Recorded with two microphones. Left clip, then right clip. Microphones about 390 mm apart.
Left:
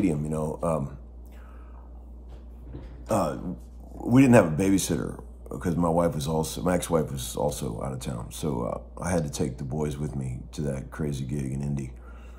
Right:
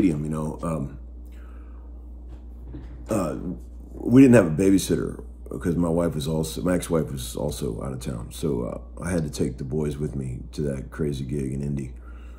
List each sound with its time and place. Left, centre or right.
0.0 s speech: centre
3.1 s a man's voice: centre